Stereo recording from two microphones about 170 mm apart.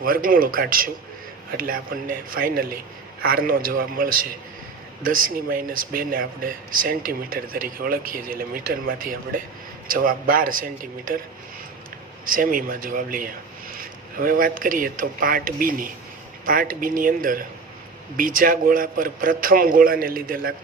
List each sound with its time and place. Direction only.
0.0 s speech: 55° right (ahead or behind)
12.2 s speech: 55° right (ahead or behind)